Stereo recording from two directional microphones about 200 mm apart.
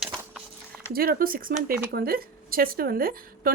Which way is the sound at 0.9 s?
45° right (ahead or behind).